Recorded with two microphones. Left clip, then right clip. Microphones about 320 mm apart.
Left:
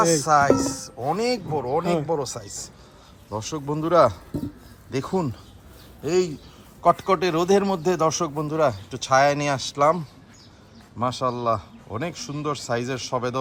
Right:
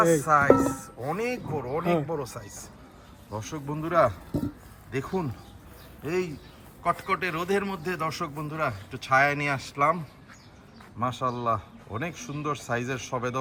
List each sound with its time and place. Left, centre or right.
0.0 s a man's voice: centre
11.0 s a man's voice: centre